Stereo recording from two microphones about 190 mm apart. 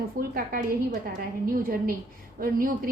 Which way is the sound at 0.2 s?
50° right (ahead or behind).